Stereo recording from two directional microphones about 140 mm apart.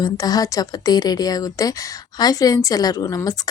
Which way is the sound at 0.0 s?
25° left (ahead or behind).